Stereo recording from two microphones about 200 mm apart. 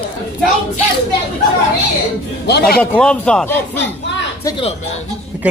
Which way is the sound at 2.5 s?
55° left (ahead or behind).